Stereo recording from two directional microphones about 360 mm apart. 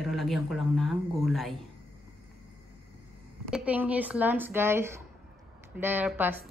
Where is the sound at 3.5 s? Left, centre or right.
Centre.